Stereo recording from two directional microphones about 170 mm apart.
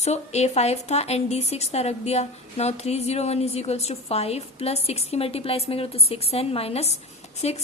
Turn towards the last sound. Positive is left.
turn(degrees=40)  # may be behind; listen again after turning